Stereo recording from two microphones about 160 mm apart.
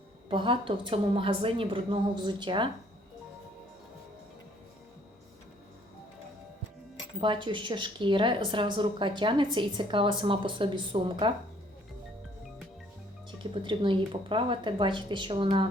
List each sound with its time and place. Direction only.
0.3 s speech: 30° right (ahead or behind)
7.2 s speech: 30° right (ahead or behind)
13.4 s speech: 30° right (ahead or behind)